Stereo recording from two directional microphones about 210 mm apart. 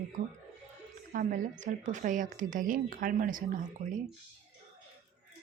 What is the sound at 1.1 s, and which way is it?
Speech, 40° right (ahead or behind).